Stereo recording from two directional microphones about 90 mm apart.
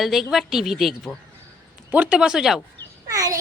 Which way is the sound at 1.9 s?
15° right (ahead or behind).